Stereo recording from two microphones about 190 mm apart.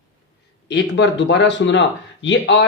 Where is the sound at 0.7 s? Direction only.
65° left (ahead or behind).